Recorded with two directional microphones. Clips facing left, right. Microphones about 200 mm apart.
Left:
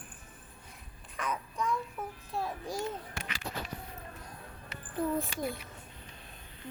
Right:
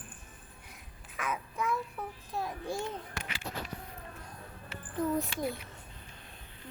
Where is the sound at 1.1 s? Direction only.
5° right (ahead or behind).